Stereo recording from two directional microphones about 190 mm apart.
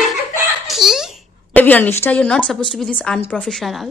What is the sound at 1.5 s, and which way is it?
A woman's voice, 10° left (ahead or behind).